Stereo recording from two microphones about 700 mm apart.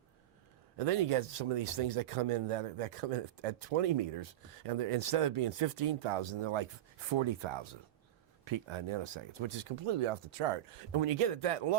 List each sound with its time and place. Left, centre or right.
0.8 s speech: right